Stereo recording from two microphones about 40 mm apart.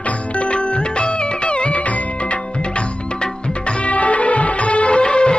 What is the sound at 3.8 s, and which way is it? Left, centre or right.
Music of bollywood, left.